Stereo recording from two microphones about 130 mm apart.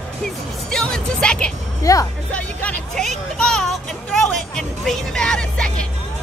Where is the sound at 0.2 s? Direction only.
5° left (ahead or behind).